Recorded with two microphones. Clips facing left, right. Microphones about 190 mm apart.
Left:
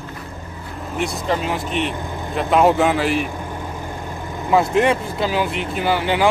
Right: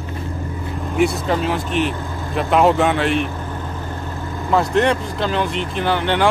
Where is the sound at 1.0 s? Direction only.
Centre (ahead or behind).